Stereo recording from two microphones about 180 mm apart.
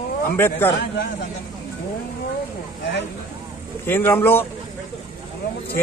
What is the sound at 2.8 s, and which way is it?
Speech, 75° left (ahead or behind).